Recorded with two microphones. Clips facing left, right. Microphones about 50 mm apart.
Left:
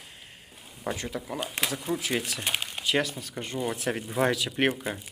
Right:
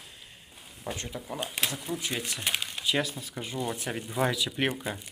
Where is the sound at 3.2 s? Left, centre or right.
Left.